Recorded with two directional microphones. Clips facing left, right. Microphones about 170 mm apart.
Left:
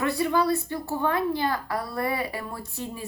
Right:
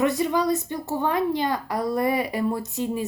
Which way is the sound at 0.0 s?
20° right (ahead or behind).